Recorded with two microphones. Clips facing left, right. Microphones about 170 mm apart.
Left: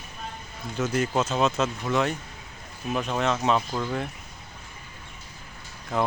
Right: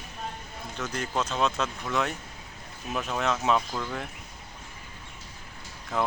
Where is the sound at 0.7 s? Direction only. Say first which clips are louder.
Left 6 dB; 5° left (ahead or behind).